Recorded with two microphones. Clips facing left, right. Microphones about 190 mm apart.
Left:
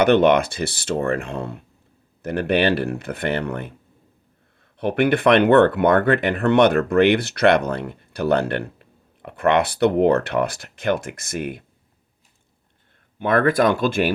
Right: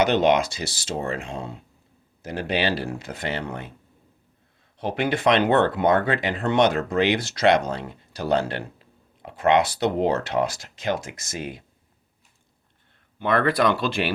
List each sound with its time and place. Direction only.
0.0 s speech: 60° left (ahead or behind)
4.8 s speech: 60° left (ahead or behind)
13.1 s speech: 50° left (ahead or behind)